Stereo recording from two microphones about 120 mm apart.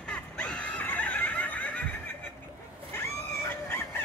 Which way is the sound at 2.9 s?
20° left (ahead or behind).